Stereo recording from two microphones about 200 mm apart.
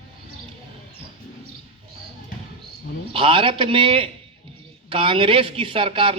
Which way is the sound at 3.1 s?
25° right (ahead or behind).